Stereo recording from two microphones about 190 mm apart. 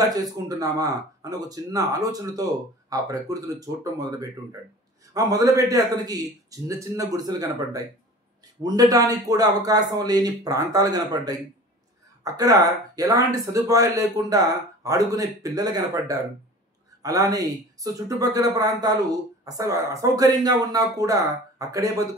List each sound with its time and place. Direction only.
0.3 s speech: 20° right (ahead or behind)